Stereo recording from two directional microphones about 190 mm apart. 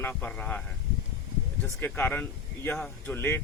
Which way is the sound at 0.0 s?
10° left (ahead or behind).